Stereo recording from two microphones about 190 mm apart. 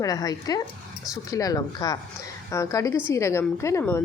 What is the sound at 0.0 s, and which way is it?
A woman's voice, 20° left (ahead or behind).